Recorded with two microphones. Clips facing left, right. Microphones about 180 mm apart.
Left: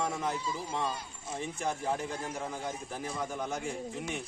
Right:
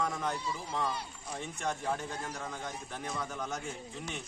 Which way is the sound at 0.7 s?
25° left (ahead or behind).